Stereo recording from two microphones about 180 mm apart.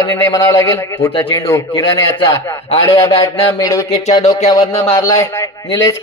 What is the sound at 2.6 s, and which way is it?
Speech, 30° left (ahead or behind).